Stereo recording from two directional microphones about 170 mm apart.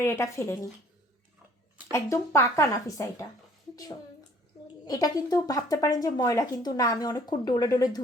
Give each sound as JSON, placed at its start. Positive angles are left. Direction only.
{"t": 0.0, "sound": "speech", "side_deg": 15}
{"t": 1.9, "sound": "speech", "side_deg": 15}
{"t": 4.9, "sound": "speech", "side_deg": 20}